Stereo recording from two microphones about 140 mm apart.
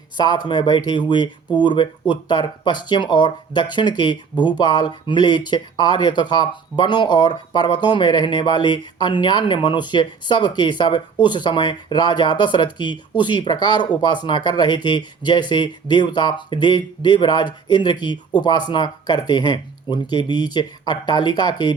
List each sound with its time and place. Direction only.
0.2 s speech: 30° left (ahead or behind)